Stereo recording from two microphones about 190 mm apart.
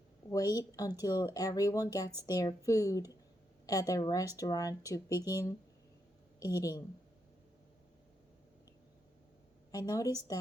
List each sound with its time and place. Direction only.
0.3 s speech: 20° left (ahead or behind)
9.7 s speech: 20° left (ahead or behind)